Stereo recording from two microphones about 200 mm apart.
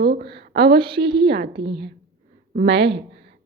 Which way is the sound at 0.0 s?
50° right (ahead or behind).